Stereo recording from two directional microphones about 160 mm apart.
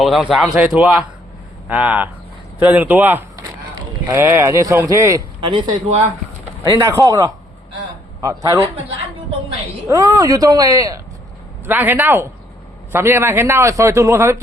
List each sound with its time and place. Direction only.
0.0 s a man's voice: 5° right (ahead or behind); by 8.6 s 20° right (ahead or behind)
9.9 s a man's voice: 20° right (ahead or behind)